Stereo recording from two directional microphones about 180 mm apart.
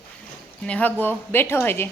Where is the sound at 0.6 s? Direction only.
10° left (ahead or behind).